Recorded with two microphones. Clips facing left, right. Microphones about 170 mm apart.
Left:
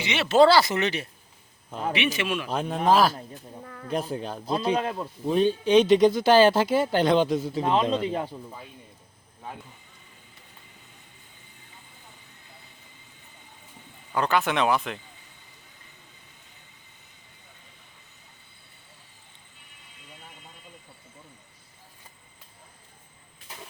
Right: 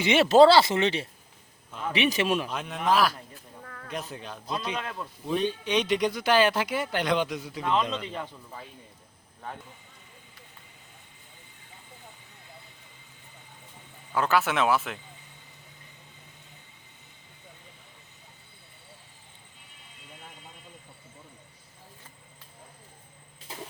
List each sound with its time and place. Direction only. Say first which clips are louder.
0.0 s speech: right 2 dB; 45° right (ahead or behind); by 1.0 s 25° right (ahead or behind)
2.0 s a man's voice: right 5 dB; 40° right (ahead or behind)
2.5 s speech: left 4 dB; 35° left (ahead or behind)
3.8 s speech: left 8 dB; 35° left (ahead or behind)
14.1 s speech: left 1 dB; 5° right (ahead or behind)